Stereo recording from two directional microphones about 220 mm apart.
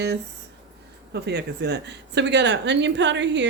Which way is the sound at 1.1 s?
50° right (ahead or behind).